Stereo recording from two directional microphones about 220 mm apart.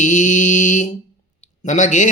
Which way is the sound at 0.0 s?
35° left (ahead or behind).